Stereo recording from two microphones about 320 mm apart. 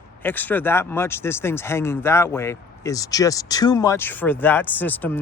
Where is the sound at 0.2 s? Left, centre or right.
Centre.